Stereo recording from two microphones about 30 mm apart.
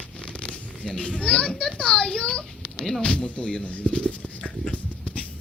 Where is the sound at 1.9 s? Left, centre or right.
Left.